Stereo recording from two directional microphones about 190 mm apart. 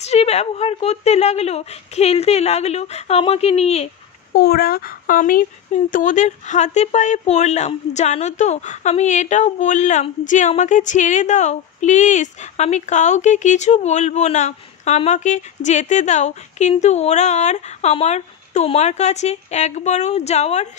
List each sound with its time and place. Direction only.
0.0 s speech: 35° left (ahead or behind)
4.3 s speech: 55° left (ahead or behind); by 20.6 s 35° left (ahead or behind)